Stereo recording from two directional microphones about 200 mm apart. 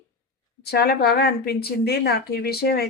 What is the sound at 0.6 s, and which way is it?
A woman's voice, 50° left (ahead or behind).